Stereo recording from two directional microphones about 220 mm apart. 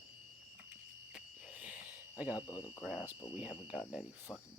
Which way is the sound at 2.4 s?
20° left (ahead or behind).